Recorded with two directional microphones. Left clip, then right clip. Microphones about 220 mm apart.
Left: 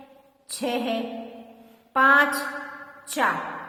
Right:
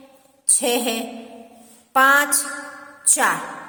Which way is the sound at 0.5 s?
45° right (ahead or behind).